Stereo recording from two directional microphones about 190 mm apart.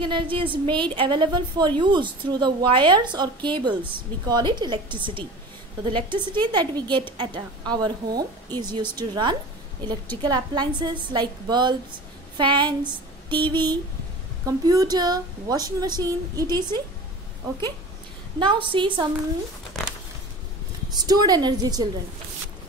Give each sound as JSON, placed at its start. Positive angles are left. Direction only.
{"t": 0.0, "sound": "a woman's voice", "side_deg": -25}
{"t": 12.4, "sound": "a sound", "side_deg": -25}
{"t": 14.4, "sound": "a woman's voice", "side_deg": -20}
{"t": 18.4, "sound": "a woman's voice", "side_deg": -25}
{"t": 19.7, "sound": "a sound", "side_deg": 0}
{"t": 20.9, "sound": "a woman's voice", "side_deg": -20}